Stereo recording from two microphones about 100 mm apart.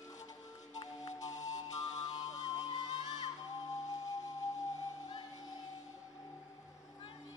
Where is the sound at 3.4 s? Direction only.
35° left (ahead or behind).